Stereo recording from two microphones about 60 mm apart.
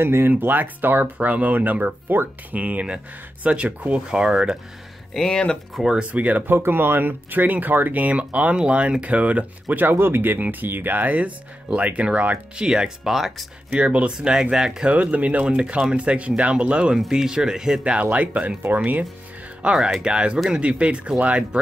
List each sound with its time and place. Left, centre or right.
0.0 s speech: right; by 4.6 s centre
5.1 s speech: centre
6.0 s speech: right
6.4 s speech: right; by 13.5 s centre
13.7 s speech: centre
14.9 s speech: right; by 17.9 s centre
18.1 s speech: right
19.7 s speech: centre
20.6 s speech: centre